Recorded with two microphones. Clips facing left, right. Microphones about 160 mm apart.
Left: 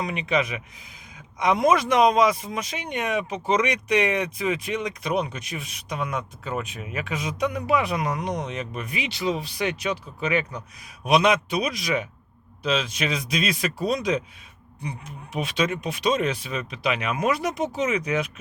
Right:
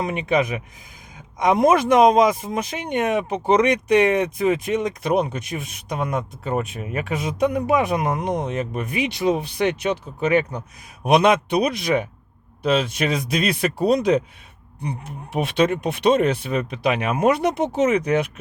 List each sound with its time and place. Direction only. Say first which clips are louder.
0.0 s speech: right 4 dB; 50° right (ahead or behind)
6.4 s speech: right 6 dB; 35° right (ahead or behind)
6.9 s speech: right 4 dB; 50° right (ahead or behind)
7.9 s speech: right 4 dB; 25° right (ahead or behind)
8.4 s speech: right 6 dB; 50° right (ahead or behind)
11.0 s speech: right 4 dB; 50° right (ahead or behind)